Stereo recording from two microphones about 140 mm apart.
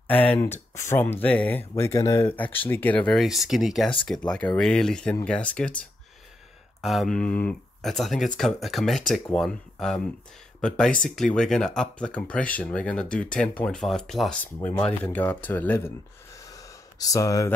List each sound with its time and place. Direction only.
0.1 s speech: 10° left (ahead or behind)
11.1 s speech: 5° left (ahead or behind)
14.7 s speech: 15° left (ahead or behind)
16.3 s gasp: 25° left (ahead or behind)